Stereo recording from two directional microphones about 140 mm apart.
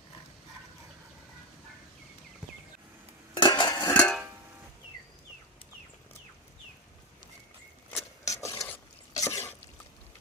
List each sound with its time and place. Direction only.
3.3 s cutlery: 30° left (ahead or behind)
3.8 s music: 10° left (ahead or behind)
8.3 s stir: 20° left (ahead or behind)
9.1 s drip: 20° left (ahead or behind)